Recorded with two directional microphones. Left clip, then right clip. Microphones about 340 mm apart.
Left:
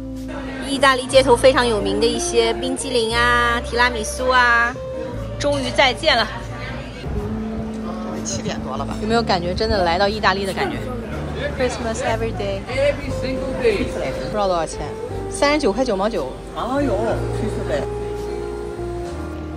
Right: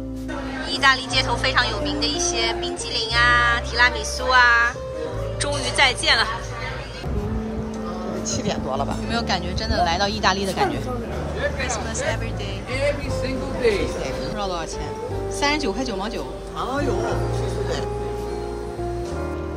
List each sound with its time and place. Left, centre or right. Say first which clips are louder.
0.7 s speech: left 2 dB; centre
8.3 s speech: right 3 dB; right
9.0 s speech: left 5 dB; centre
14.3 s speech: left 7 dB; centre